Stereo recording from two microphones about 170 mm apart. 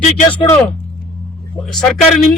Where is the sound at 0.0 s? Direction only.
40° left (ahead or behind).